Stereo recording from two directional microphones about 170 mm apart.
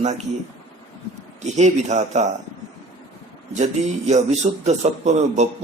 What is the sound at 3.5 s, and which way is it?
Speech, 45° right (ahead or behind).